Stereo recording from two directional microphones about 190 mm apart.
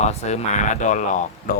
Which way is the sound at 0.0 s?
35° left (ahead or behind).